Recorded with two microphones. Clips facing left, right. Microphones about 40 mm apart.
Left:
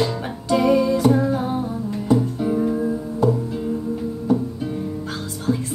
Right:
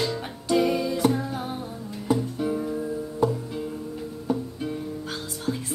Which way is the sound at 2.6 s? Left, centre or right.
Left.